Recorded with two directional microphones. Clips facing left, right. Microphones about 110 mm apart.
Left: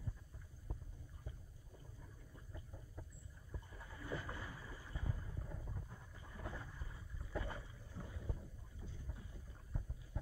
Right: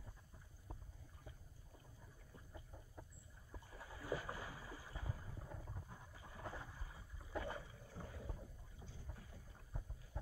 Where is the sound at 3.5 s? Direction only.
10° right (ahead or behind).